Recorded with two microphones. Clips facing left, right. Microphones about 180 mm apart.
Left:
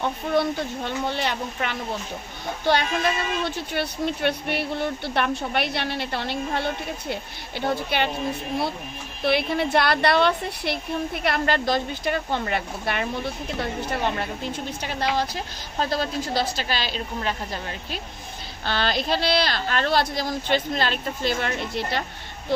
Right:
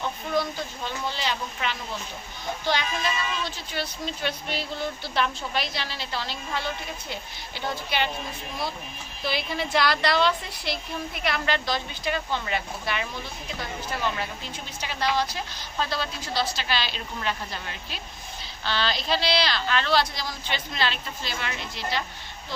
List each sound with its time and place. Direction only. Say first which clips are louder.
0.0 s a woman's voice: left 4 dB; 60° left (ahead or behind)
9.2 s a woman's voice: left 7 dB; 60° left (ahead or behind)